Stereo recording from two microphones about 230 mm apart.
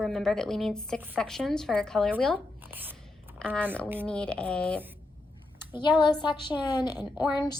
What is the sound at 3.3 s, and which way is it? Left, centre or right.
A woman's voice, centre.